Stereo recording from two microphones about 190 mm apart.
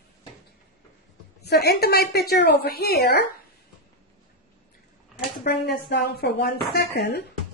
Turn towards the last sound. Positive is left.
turn(degrees=60)  # may be behind; listen again after turning